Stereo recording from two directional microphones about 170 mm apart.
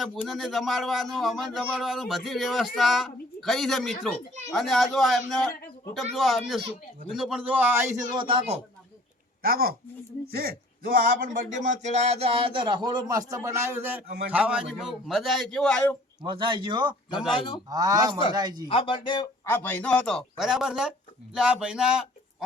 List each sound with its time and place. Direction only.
0.0 s a man's voice: centre (ahead or behind); by 8.0 s 15° right (ahead or behind)
8.1 s speech: 30° right (ahead or behind)
9.4 s speech: 65° right (ahead or behind)
10.8 s a man's voice: 55° right (ahead or behind); by 16.0 s 5° left (ahead or behind)
16.2 s a man's voice: 30° right (ahead or behind)
17.3 s speech: 30° left (ahead or behind)
17.7 s a man's voice: 20° right (ahead or behind)
18.7 s speech: 30° left (ahead or behind)
19.5 s a man's voice: 10° left (ahead or behind); by 22.4 s 5° right (ahead or behind)